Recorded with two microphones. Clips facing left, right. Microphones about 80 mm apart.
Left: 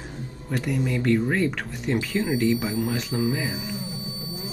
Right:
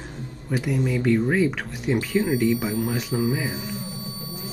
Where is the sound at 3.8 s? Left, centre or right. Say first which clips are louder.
Even; right.